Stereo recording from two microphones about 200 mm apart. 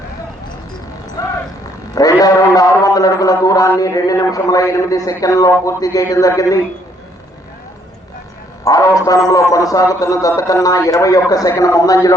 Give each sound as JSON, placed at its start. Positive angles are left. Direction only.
{"t": 1.2, "sound": "a sound", "side_deg": 20}
{"t": 2.0, "sound": "a man's voice", "side_deg": 15}
{"t": 8.6, "sound": "a man's voice", "side_deg": 15}